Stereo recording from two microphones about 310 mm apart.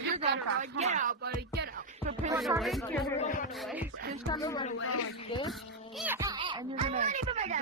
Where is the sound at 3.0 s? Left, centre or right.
Left.